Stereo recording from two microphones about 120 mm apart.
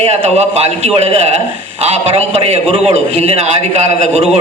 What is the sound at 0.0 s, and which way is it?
A man's voice, 60° right (ahead or behind).